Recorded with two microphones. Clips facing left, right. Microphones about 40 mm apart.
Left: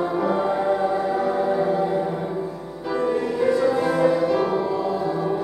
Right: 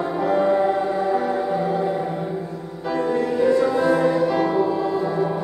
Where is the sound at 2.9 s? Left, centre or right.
Centre.